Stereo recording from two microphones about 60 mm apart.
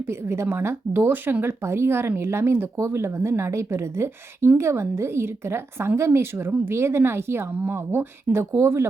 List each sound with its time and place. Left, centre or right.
0.1 s a woman's voice: right